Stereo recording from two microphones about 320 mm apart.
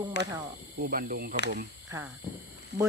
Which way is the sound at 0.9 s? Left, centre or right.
Right.